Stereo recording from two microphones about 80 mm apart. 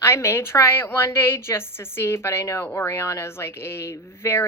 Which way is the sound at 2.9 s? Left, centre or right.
Left.